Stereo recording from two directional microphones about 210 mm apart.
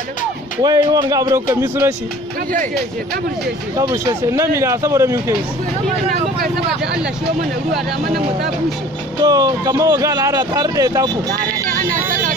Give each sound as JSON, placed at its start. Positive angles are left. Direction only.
{"t": 0.6, "sound": "speech", "side_deg": -20}
{"t": 3.7, "sound": "speech", "side_deg": -20}
{"t": 9.2, "sound": "speech", "side_deg": -15}